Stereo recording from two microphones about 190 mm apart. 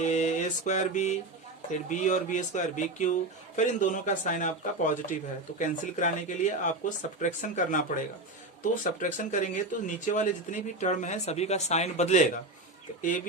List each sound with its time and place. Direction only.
0.0 s mantra: 40° left (ahead or behind)
1.9 s speech: 40° left (ahead or behind)